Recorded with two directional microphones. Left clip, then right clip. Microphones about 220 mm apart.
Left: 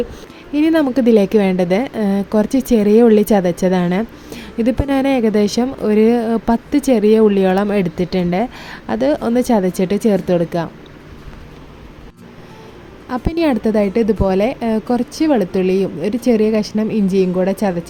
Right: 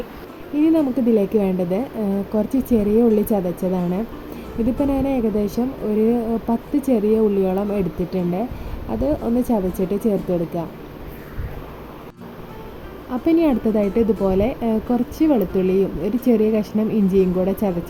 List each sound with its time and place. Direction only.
0.5 s a woman's voice: 35° left (ahead or behind)
13.1 s speech: 30° left (ahead or behind)